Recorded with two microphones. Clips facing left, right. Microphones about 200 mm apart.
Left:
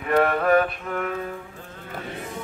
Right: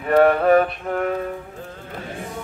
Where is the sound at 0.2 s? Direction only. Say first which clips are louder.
Right 6 dB; 35° right (ahead or behind).